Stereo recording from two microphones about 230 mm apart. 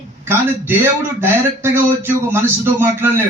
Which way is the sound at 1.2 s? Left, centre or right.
Centre.